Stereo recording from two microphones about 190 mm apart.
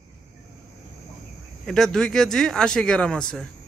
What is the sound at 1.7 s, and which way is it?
Speech, centre (ahead or behind).